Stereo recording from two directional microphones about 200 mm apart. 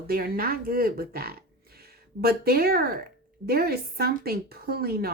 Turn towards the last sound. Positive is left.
turn(degrees=-50)  # may be behind; listen again after turning